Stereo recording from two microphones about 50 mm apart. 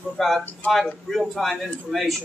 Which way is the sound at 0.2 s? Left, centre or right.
Centre.